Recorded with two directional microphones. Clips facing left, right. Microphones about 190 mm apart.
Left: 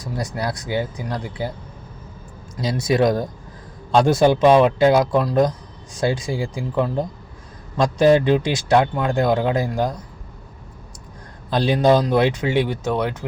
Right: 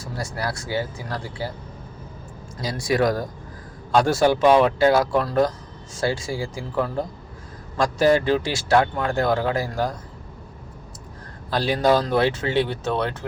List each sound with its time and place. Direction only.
0.0 s speech: 20° left (ahead or behind)
2.6 s speech: 20° left (ahead or behind)
11.5 s speech: 20° left (ahead or behind)